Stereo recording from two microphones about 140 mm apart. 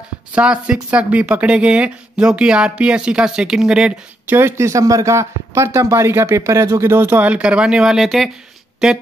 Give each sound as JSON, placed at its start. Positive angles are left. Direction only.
{"t": 0.3, "sound": "speech", "side_deg": -5}
{"t": 4.4, "sound": "speech", "side_deg": -20}